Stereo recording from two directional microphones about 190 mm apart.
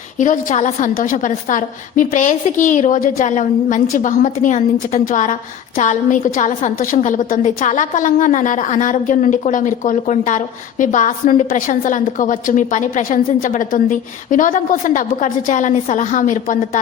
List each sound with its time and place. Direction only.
0.2 s a woman's voice: 40° left (ahead or behind)